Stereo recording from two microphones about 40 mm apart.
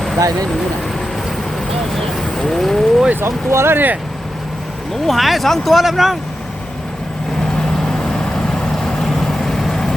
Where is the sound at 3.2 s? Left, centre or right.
Right.